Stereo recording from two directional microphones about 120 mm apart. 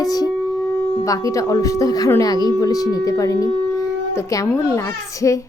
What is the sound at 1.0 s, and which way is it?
Speech, 30° left (ahead or behind).